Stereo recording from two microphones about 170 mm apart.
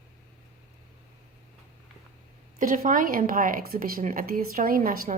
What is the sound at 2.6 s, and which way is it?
A woman's voice, 55° right (ahead or behind).